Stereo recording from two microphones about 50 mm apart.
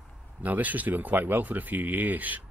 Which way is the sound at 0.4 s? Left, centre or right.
Right.